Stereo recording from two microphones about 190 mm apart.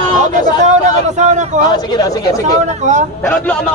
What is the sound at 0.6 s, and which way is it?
Speech, 40° right (ahead or behind).